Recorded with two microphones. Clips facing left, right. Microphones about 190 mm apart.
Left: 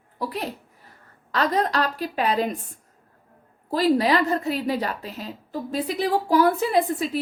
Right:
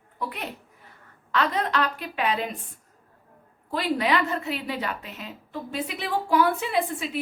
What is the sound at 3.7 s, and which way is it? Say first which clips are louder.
A woman's voice: left 5 dB; 35° left (ahead or behind).